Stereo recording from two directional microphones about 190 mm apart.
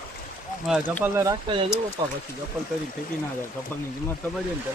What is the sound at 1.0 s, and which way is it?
Speech, 15° right (ahead or behind).